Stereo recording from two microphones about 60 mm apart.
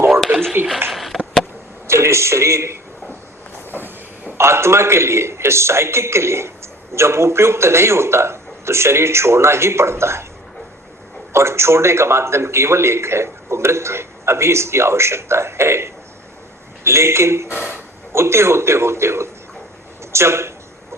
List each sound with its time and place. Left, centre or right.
0.9 s sniff: centre
1.9 s a man's voice: right
4.4 s a man's voice: right
11.3 s a man's voice: right